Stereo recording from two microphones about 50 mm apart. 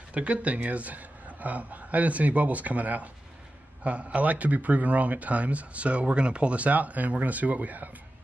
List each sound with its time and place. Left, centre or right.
0.1 s a man's voice: right